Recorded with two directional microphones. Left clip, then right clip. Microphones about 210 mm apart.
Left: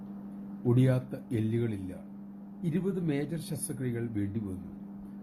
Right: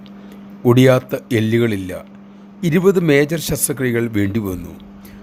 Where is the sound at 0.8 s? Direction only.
55° right (ahead or behind).